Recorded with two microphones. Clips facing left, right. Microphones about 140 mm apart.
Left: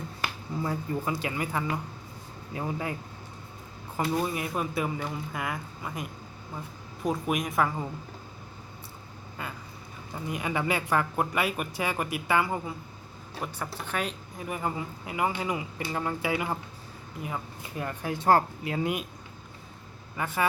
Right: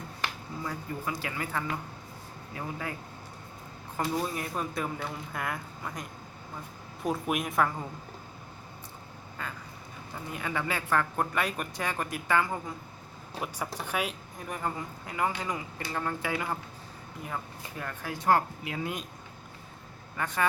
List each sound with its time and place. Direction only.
0.6 s speech: 25° left (ahead or behind)
3.9 s speech: 10° left (ahead or behind)
9.4 s quack: 10° left (ahead or behind)
10.2 s speech: 15° left (ahead or behind)
13.4 s speech: 10° right (ahead or behind)
14.4 s speech: 10° left (ahead or behind)
18.3 s speech: 35° left (ahead or behind)
20.1 s speech: 5° left (ahead or behind)